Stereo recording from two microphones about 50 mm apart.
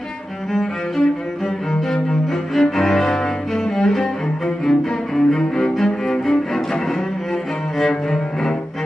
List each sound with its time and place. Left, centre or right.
0.5 s cello: centre
7.8 s cello: centre